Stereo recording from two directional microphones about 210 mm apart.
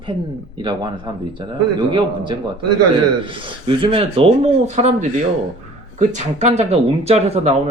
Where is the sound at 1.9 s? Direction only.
20° right (ahead or behind).